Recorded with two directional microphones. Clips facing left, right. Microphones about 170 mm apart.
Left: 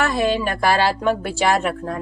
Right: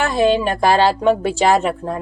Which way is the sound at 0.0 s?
25° right (ahead or behind).